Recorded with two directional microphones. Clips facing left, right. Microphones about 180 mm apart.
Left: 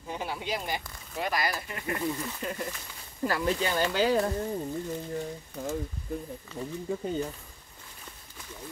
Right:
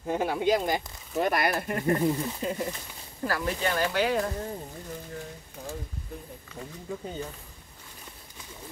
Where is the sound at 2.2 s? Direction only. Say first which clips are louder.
Right 4 dB; 20° right (ahead or behind).